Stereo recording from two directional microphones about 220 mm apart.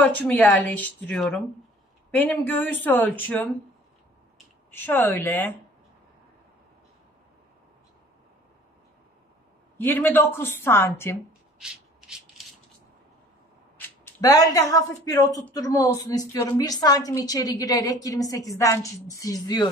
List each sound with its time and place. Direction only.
0.0 s a woman's voice: 5° left (ahead or behind)
4.6 s a woman's voice: 10° left (ahead or behind)
9.8 s a woman's voice: 10° left (ahead or behind)
11.6 s rub: 5° right (ahead or behind)
13.7 s a woman's voice: 10° left (ahead or behind)